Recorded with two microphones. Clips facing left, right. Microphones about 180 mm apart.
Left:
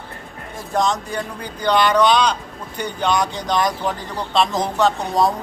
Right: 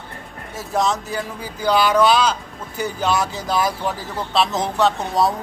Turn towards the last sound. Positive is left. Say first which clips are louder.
# left 1 dB
turn(degrees=0)  # may be behind; listen again after turning